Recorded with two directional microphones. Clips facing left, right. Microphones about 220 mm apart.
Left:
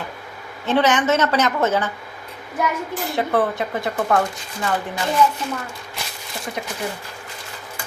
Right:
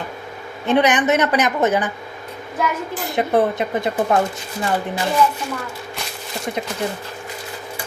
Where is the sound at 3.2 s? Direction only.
20° right (ahead or behind).